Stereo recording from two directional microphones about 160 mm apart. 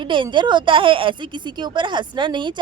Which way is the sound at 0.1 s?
30° right (ahead or behind).